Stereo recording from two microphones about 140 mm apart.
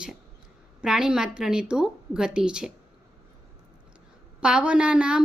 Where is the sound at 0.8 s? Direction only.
5° right (ahead or behind).